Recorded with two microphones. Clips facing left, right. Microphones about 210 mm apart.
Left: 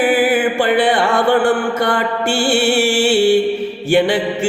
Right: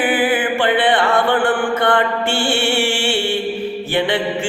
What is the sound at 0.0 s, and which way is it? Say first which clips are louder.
Mantra: left 3 dB; 45° left (ahead or behind).